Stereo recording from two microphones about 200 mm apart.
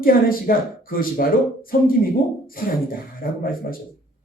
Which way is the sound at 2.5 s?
45° left (ahead or behind).